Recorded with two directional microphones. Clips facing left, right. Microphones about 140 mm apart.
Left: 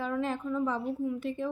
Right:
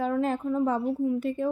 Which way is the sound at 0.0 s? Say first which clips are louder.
Right 5 dB; 45° right (ahead or behind).